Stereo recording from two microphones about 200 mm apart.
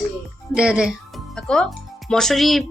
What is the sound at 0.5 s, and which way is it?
A woman's voice, 5° right (ahead or behind).